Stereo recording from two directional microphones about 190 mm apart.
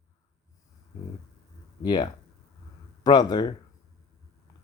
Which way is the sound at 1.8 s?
20° left (ahead or behind).